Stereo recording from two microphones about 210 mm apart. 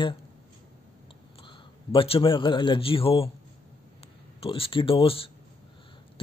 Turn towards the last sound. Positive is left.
turn(degrees=25)  # may be behind; listen again after turning